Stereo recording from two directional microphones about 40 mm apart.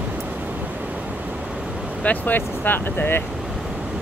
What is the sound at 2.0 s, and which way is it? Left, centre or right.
Speech, left.